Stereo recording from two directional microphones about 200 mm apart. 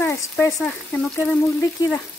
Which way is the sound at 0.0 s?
15° left (ahead or behind).